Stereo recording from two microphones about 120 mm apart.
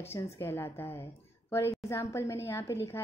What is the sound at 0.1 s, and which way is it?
A woman's voice, 20° left (ahead or behind).